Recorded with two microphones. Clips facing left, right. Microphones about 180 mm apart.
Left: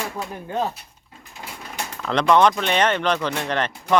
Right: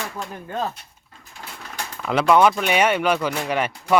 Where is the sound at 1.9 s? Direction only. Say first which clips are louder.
Right 1 dB; 5° right (ahead or behind).